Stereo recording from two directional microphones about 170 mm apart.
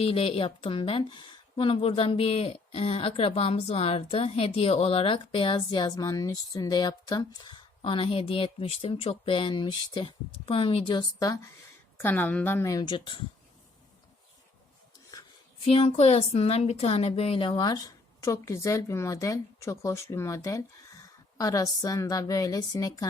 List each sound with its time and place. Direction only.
0.0 s speech: 35° left (ahead or behind)
11.9 s a woman's voice: 10° left (ahead or behind); by 13.2 s 30° left (ahead or behind)
15.6 s a woman's voice: 35° left (ahead or behind)